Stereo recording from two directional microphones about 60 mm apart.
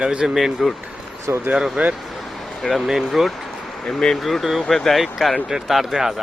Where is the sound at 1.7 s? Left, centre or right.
Centre.